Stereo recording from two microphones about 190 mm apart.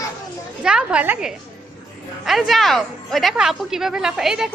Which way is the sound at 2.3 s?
Centre (ahead or behind).